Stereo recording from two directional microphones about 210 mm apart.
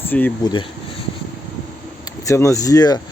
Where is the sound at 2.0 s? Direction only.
15° left (ahead or behind).